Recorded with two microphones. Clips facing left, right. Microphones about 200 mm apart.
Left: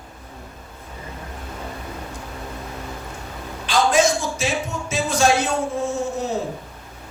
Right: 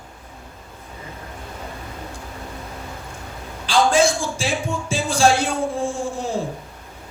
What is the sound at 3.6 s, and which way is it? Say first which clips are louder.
A man's voice: right 1 dB; 30° right (ahead or behind).